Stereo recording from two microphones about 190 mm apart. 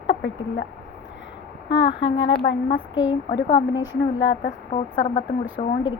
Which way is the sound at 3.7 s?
80° left.